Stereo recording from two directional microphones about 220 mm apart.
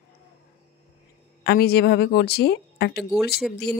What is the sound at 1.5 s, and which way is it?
A woman's voice, 45° left (ahead or behind).